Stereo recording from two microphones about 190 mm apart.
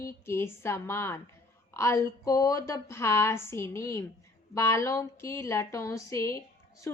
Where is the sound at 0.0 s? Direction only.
15° left (ahead or behind).